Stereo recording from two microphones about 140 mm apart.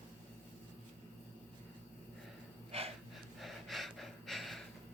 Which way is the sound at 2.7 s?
45° right (ahead or behind).